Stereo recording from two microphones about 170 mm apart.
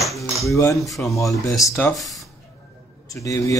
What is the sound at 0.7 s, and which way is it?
Speech, centre (ahead or behind).